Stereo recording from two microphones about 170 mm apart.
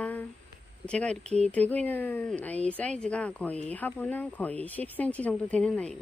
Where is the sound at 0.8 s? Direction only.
5° left (ahead or behind).